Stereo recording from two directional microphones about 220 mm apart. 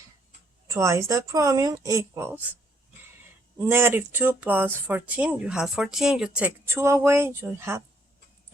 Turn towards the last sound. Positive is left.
turn(degrees=-10)  # may be behind; listen again after turning